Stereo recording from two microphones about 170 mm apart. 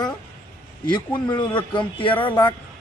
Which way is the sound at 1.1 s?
25° left (ahead or behind).